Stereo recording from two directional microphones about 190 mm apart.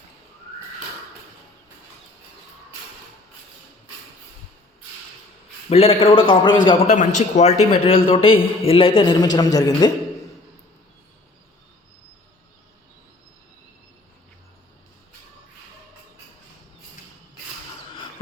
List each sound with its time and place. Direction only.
5.6 s a man's voice: 30° left (ahead or behind)
6.7 s a man's voice: 40° left (ahead or behind); by 9.9 s 20° left (ahead or behind)